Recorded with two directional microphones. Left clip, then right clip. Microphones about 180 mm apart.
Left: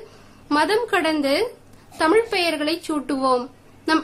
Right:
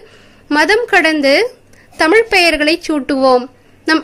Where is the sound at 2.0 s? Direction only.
35° right (ahead or behind).